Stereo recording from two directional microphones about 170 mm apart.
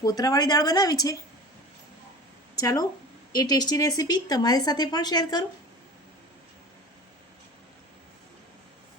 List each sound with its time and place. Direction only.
0.0 s speech: 20° left (ahead or behind)
2.6 s speech: 20° left (ahead or behind)